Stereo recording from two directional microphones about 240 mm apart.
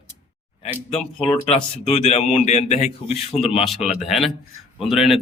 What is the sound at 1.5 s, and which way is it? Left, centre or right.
A man's voice, left.